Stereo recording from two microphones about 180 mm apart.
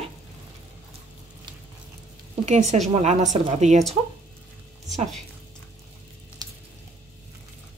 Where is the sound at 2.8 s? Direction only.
40° right (ahead or behind).